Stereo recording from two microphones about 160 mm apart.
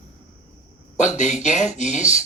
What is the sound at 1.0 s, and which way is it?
Speech, 45° left (ahead or behind).